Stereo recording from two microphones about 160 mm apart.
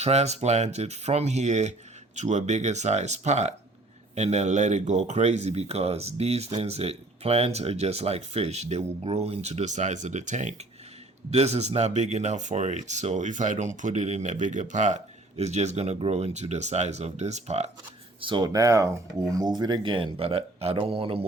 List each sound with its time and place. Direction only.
0.0 s speech: 45° right (ahead or behind)
18.2 s speech: 30° right (ahead or behind)